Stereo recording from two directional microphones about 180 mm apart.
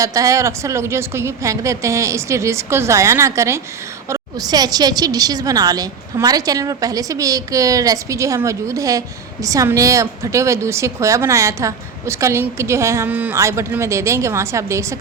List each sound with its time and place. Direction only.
0.0 s a woman's voice: 20° right (ahead or behind)